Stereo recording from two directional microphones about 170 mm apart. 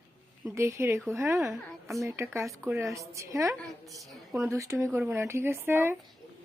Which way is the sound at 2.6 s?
15° right (ahead or behind).